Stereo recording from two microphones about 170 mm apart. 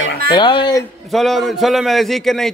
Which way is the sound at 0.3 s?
25° left (ahead or behind).